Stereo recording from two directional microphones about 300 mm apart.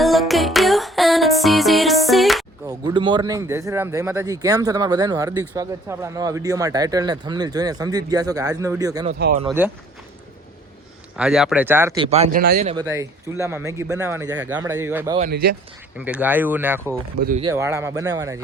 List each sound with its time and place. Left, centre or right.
0.0 s music: centre
2.6 s speech: centre
9.0 s speech: right
9.5 s speech: centre
11.2 s speech: centre
12.0 s speech: right
12.7 s speech: centre
15.2 s speech: right
16.0 s speech: centre
17.2 s speech: right
17.4 s speech: centre